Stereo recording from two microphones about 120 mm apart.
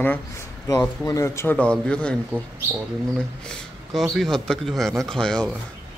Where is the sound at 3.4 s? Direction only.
5° left (ahead or behind).